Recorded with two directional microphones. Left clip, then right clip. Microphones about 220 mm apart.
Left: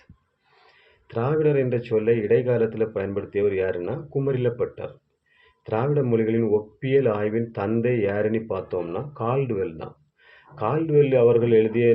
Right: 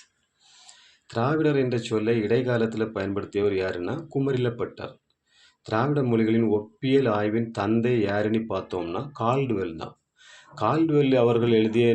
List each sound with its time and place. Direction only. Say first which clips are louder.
1.1 s speech: left 2 dB; 25° right (ahead or behind)